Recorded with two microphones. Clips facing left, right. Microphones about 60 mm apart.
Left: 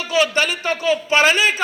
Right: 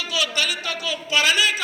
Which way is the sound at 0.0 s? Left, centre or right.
Left.